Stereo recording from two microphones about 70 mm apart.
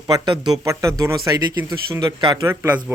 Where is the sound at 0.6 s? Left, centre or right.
Right.